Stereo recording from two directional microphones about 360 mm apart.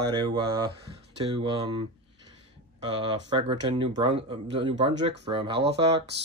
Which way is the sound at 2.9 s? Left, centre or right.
Centre.